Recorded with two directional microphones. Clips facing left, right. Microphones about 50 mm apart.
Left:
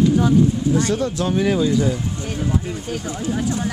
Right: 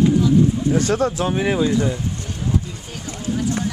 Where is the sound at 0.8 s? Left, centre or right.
Right.